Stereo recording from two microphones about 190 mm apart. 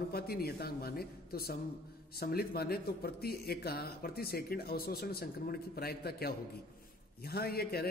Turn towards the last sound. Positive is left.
turn(degrees=55)  # may be behind; listen again after turning